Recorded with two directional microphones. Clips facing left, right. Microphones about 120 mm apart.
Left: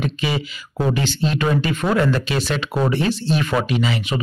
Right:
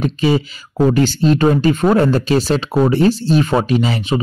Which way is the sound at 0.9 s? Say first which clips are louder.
Right 8 dB; 40° right (ahead or behind).